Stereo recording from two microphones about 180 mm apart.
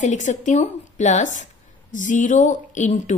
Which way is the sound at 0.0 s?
45° left (ahead or behind).